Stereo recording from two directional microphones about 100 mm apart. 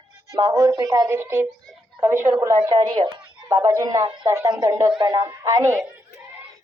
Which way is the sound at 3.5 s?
35° right (ahead or behind).